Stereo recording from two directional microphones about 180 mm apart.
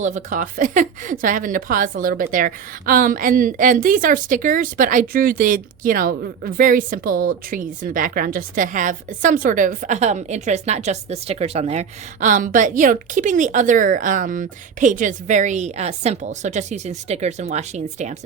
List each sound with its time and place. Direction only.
0.0 s a woman's voice: 45° right (ahead or behind)